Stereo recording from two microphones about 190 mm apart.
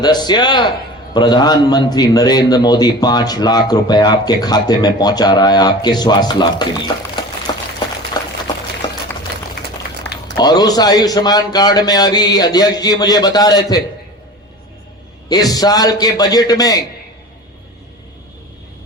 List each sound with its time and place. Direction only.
0.0 s a man's voice: 20° left (ahead or behind)
7.5 s a sound: 25° left (ahead or behind)
10.3 s a man's voice: 20° left (ahead or behind)
15.3 s a man's voice: 20° left (ahead or behind)